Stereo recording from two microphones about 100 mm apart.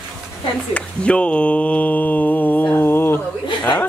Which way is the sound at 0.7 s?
10° left (ahead or behind).